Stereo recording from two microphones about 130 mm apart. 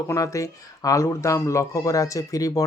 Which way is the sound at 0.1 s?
25° left (ahead or behind).